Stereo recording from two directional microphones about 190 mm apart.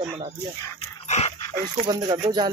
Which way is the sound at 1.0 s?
35° left (ahead or behind).